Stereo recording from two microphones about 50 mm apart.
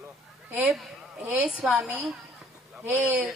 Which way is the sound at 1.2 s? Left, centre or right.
Centre.